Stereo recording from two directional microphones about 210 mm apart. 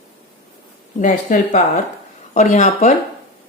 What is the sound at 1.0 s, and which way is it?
Speech, 35° left (ahead or behind).